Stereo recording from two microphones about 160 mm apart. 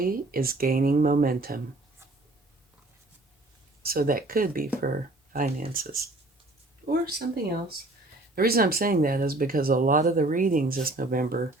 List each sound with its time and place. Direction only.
0.0 s speech: 65° right (ahead or behind)
3.8 s speech: 65° right (ahead or behind)
8.4 s speech: 70° right (ahead or behind)